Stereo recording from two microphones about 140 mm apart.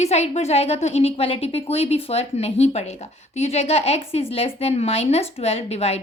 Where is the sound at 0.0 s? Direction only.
50° left (ahead or behind).